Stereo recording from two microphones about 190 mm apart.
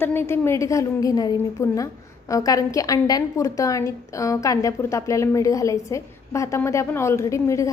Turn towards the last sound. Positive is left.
turn(degrees=15)  # may be behind; listen again after turning